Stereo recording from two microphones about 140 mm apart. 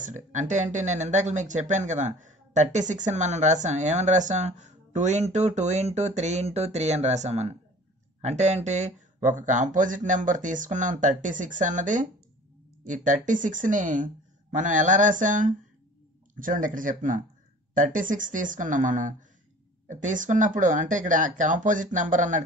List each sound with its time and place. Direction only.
0.0 s speech: 60° right (ahead or behind)